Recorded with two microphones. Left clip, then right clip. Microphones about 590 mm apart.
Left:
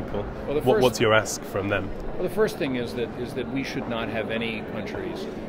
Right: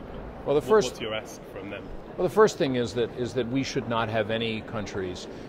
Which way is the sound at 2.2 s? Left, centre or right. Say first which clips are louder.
Right 4 dB; right.